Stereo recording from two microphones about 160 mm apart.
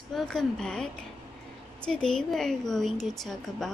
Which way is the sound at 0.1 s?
5° left (ahead or behind).